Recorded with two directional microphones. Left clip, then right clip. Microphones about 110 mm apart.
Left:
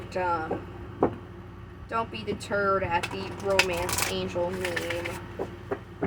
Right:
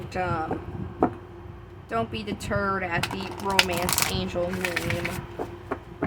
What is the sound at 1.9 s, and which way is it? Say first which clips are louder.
Speech: right 1 dB; 65° right (ahead or behind).